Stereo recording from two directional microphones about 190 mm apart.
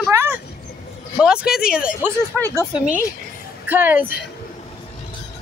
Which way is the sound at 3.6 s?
10° right (ahead or behind).